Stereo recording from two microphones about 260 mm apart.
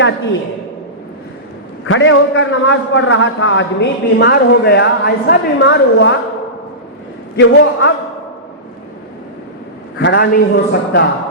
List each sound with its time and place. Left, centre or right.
1.9 s a man's voice: left
7.3 s a man's voice: left
10.0 s a man's voice: left